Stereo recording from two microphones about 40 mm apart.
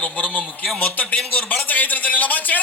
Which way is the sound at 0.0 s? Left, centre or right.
Left.